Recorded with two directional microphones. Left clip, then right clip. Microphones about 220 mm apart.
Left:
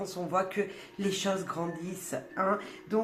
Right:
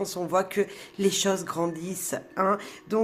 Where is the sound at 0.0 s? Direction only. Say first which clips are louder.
Right 5 dB; 40° right (ahead or behind).